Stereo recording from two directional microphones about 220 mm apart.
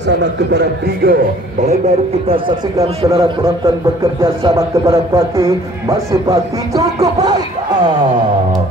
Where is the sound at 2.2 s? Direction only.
25° right (ahead or behind).